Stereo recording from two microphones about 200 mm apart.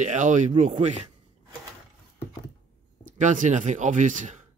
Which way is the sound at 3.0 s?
40° right (ahead or behind).